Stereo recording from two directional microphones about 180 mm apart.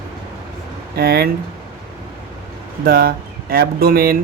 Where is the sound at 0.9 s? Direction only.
60° right (ahead or behind).